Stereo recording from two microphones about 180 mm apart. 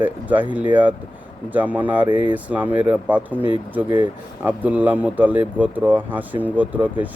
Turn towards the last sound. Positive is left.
turn(degrees=-10)  # may be behind; listen again after turning